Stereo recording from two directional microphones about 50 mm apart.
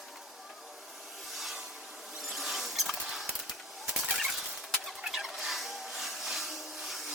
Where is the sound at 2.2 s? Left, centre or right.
Centre.